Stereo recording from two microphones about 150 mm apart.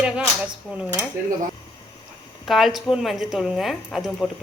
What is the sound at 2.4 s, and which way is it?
A woman's voice, centre (ahead or behind).